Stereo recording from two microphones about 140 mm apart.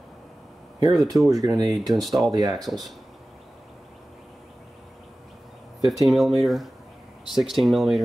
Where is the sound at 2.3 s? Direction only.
25° right (ahead or behind).